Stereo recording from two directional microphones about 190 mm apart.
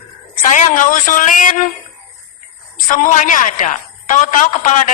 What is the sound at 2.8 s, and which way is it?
A man's voice, 45° left (ahead or behind).